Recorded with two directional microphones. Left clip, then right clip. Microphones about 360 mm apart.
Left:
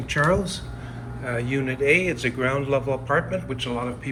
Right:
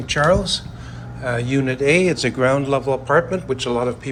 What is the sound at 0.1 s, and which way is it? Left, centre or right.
A man's voice, centre.